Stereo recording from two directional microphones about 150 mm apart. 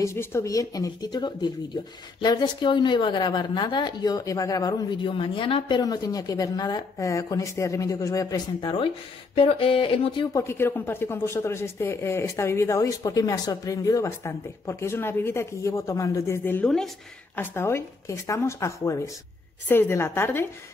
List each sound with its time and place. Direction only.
0.0 s a woman's voice: 15° left (ahead or behind)
8.5 s speech: 35° left (ahead or behind)
10.3 s a woman's voice: 15° left (ahead or behind)
17.4 s a woman's voice: 15° left (ahead or behind)